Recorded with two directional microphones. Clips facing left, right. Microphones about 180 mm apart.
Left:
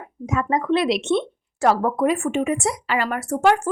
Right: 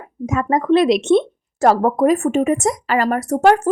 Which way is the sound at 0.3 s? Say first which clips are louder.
Right 5 dB; 45° right (ahead or behind).